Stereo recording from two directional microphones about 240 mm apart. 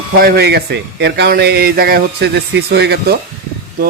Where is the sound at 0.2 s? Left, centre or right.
Right.